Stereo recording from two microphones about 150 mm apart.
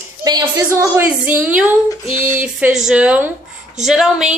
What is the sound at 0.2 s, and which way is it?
Speech, 25° right (ahead or behind).